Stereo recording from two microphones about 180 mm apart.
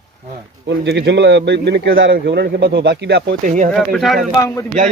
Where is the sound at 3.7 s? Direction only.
Centre (ahead or behind).